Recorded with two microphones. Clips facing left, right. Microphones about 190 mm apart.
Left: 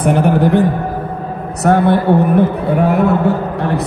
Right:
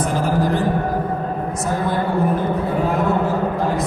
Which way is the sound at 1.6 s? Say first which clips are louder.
Left 11 dB; 65° left (ahead or behind).